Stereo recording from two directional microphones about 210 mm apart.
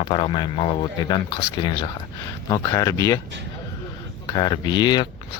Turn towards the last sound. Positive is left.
turn(degrees=20)  # may be behind; listen again after turning